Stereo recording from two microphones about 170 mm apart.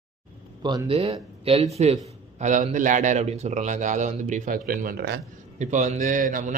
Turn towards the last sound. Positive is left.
turn(degrees=-50)  # may be behind; listen again after turning